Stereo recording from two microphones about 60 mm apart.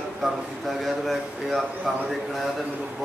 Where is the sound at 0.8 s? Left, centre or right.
Centre.